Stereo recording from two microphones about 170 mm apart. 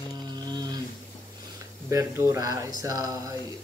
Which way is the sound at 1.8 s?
15° right (ahead or behind).